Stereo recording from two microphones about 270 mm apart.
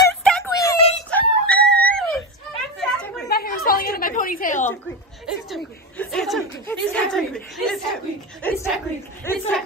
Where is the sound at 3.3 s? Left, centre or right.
Left.